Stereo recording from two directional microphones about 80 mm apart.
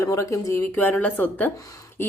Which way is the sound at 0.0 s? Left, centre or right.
Left.